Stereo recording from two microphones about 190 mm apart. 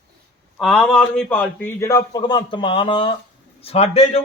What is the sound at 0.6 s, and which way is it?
A man's voice, centre (ahead or behind).